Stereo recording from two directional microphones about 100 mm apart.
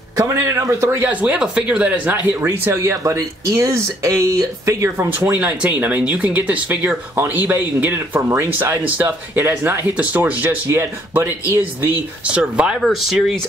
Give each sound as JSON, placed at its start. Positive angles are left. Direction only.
{"t": 0.2, "sound": "speech", "side_deg": -30}
{"t": 1.0, "sound": "speech", "side_deg": -15}
{"t": 2.4, "sound": "speech", "side_deg": -30}
{"t": 5.4, "sound": "speech", "side_deg": -15}
{"t": 12.8, "sound": "speech", "side_deg": 0}